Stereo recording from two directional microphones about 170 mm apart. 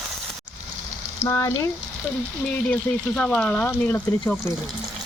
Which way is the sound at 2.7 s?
5° left (ahead or behind).